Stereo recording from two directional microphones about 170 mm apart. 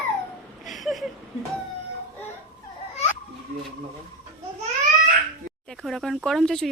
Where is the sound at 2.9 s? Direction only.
40° left (ahead or behind).